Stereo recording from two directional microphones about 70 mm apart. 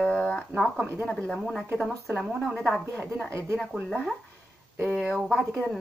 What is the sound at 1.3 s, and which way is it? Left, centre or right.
Speech, centre.